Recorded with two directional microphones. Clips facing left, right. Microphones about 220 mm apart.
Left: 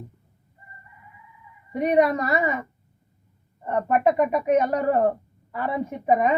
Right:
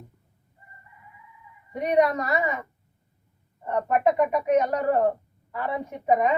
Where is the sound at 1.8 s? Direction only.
5° left (ahead or behind).